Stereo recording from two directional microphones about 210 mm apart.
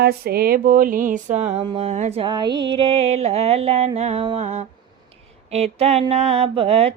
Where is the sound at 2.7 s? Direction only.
25° right (ahead or behind).